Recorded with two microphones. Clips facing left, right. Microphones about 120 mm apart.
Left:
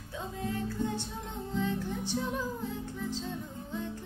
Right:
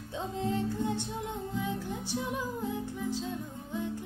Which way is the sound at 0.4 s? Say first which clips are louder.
Right 2 dB; 20° right (ahead or behind).